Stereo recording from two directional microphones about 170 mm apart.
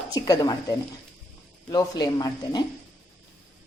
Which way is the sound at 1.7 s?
25° left (ahead or behind).